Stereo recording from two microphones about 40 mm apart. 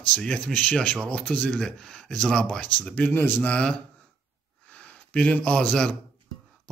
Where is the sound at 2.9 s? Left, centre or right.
Left.